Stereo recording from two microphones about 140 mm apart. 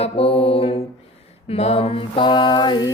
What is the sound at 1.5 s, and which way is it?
Mantra, 45° left (ahead or behind).